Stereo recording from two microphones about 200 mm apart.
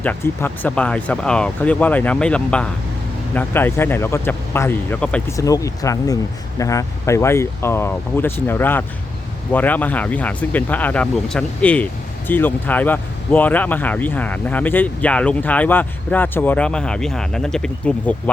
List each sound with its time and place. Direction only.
0.0 s speech: 10° left (ahead or behind)